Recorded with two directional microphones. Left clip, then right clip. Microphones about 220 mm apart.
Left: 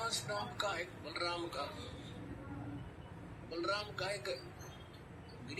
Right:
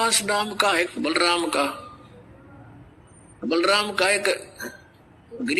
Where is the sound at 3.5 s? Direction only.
50° right (ahead or behind).